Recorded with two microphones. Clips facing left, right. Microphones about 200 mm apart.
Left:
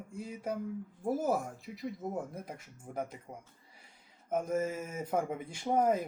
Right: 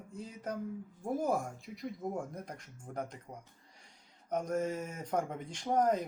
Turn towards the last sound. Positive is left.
turn(degrees=5)  # may be behind; listen again after turning